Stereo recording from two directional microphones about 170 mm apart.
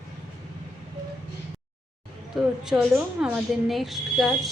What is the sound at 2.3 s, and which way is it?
Speech, 5° right (ahead or behind).